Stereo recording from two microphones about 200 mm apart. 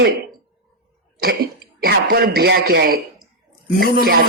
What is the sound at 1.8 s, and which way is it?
A man's voice, 50° right (ahead or behind).